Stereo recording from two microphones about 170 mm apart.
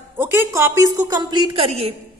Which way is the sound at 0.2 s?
15° right (ahead or behind).